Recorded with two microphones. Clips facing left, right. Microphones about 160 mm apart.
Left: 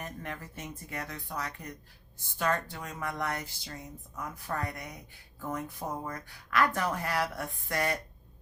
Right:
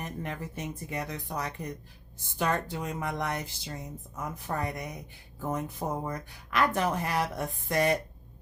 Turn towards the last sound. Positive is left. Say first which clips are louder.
# right 5 dB
turn(degrees=-20)  # may be behind; listen again after turning